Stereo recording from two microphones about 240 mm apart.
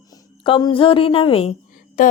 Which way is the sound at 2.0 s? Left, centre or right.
Left.